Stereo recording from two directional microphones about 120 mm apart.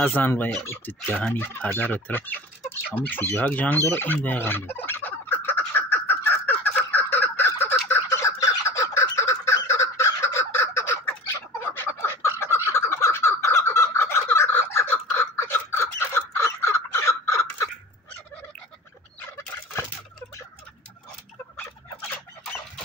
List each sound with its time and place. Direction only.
0.0 s speech: 15° left (ahead or behind)
2.9 s fowl: 15° left (ahead or behind)
11.7 s a sound: 20° left (ahead or behind)
12.7 s crow: 20° left (ahead or behind)